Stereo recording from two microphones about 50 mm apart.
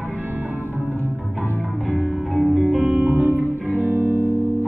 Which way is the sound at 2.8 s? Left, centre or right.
Right.